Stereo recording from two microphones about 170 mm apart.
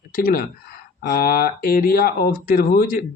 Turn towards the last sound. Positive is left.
turn(degrees=55)  # may be behind; listen again after turning